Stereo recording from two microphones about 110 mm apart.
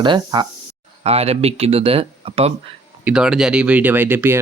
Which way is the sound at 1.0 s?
65° right (ahead or behind).